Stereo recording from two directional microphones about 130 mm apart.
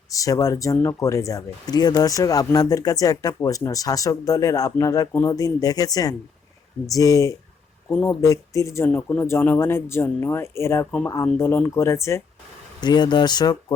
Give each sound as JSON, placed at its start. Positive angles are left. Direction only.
{"t": 0.1, "sound": "speech", "side_deg": 25}
{"t": 12.8, "sound": "speech", "side_deg": 35}